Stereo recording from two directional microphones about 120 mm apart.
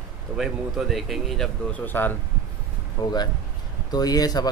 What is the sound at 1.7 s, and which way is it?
Speech, 15° left (ahead or behind).